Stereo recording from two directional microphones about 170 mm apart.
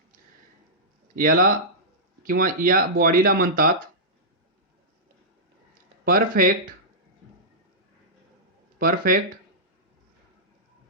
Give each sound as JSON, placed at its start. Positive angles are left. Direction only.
{"t": 1.1, "sound": "speech", "side_deg": -55}
{"t": 6.1, "sound": "speech", "side_deg": -60}
{"t": 8.8, "sound": "speech", "side_deg": -55}